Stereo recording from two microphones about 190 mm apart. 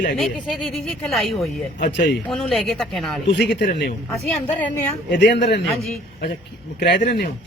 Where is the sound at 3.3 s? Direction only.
60° left (ahead or behind).